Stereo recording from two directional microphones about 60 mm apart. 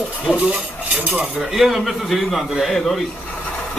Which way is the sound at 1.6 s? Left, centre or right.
Centre.